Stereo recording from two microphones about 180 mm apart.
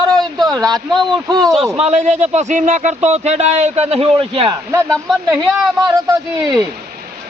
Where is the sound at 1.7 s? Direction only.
40° right (ahead or behind).